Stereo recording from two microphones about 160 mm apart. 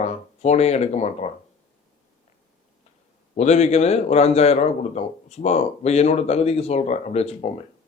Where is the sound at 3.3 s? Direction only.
45° left (ahead or behind).